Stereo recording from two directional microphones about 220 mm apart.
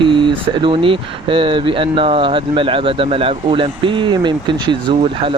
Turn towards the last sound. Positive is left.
turn(degrees=-25)  # may be behind; listen again after turning